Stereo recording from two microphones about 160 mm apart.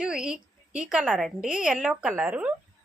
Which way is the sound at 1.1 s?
Centre (ahead or behind).